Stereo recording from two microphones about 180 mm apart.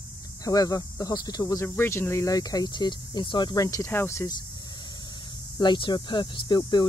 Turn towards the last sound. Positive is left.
turn(degrees=25)  # may be behind; listen again after turning